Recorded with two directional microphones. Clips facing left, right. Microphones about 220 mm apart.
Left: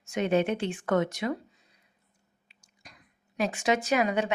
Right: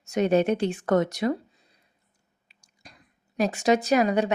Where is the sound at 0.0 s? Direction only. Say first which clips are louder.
Right 4 dB; 40° right (ahead or behind).